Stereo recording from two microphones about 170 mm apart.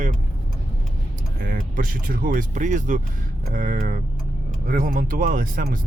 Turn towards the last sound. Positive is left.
turn(degrees=-50)  # may be behind; listen again after turning